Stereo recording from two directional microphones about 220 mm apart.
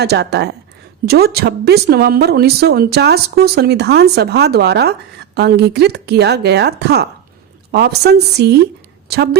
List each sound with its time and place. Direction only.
0.0 s a woman's voice: 50° right (ahead or behind)